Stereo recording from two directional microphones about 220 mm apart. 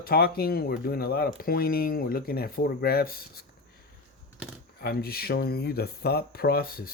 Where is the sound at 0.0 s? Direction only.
45° left (ahead or behind).